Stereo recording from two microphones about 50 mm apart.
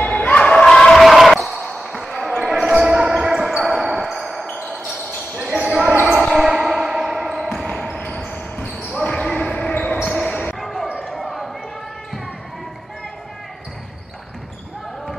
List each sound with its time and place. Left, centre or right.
0.0 s a sound: left
0.7 s a sound: centre
1.0 s basketball bounce: centre
4.1 s music: centre
5.4 s basketball bounce: centre
7.7 s basketball bounce: centre
8.5 s basketball bounce: left
9.1 s basketball bounce: centre
10.1 s basketball bounce: centre
10.6 s basketball bounce: centre